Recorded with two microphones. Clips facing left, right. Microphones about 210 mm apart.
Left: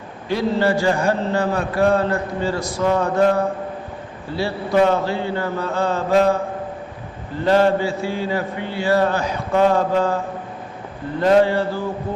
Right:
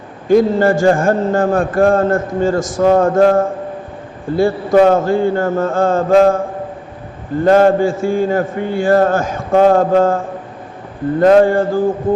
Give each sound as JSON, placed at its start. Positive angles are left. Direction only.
{"t": 0.3, "sound": "a man's voice", "side_deg": -50}
{"t": 7.4, "sound": "a man's voice", "side_deg": -50}